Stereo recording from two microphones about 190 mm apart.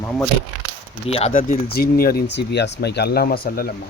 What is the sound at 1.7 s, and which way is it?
Speech, 55° left (ahead or behind).